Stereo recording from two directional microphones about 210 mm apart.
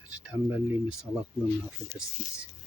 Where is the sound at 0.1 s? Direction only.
5° right (ahead or behind).